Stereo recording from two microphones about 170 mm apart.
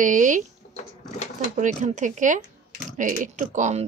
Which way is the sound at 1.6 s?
45° right (ahead or behind).